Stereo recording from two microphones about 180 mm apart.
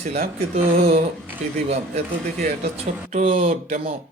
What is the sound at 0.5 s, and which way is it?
Speech, 35° right (ahead or behind).